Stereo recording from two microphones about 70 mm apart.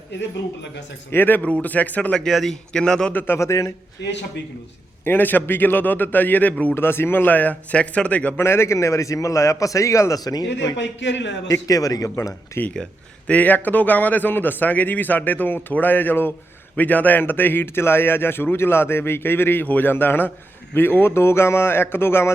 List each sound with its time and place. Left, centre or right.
1.1 s a man's voice: left; by 3.1 s centre
3.1 s speech: left
3.3 s a man's voice: left
5.0 s speech: left
6.7 s speech: left; by 8.4 s centre
8.4 s a man's voice: left
10.2 s speech: left
12.7 s a sound: centre
13.3 s a man's voice: left